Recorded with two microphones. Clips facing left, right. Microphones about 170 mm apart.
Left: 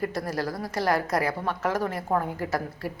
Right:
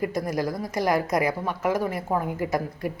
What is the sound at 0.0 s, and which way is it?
Speech, 15° right (ahead or behind).